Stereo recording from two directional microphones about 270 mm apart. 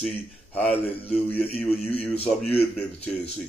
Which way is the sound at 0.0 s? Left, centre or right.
Centre.